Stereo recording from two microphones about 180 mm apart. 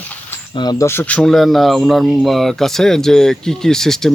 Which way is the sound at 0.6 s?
20° left (ahead or behind).